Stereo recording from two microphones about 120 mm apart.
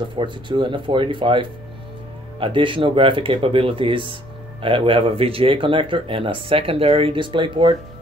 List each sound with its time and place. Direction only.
0.1 s speech: 45° right (ahead or behind)